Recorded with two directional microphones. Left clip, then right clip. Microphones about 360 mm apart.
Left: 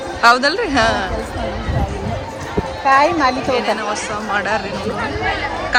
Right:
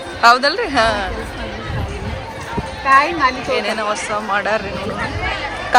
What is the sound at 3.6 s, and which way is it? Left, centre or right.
Speech, centre.